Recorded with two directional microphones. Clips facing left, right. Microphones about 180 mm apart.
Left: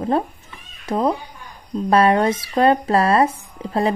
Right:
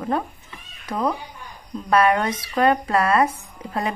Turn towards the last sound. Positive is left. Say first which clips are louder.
# left 6 dB
turn(degrees=30)  # may be behind; listen again after turning